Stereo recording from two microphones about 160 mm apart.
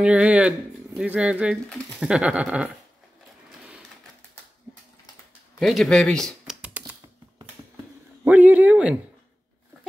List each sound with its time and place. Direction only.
0.0 s speech: 5° right (ahead or behind)
5.6 s speech: centre (ahead or behind)
8.2 s speech: 10° right (ahead or behind)